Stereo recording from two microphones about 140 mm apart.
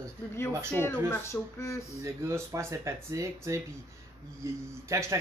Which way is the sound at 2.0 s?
20° right (ahead or behind).